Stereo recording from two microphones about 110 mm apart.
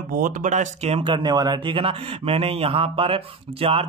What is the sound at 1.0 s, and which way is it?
Speech, 45° right (ahead or behind).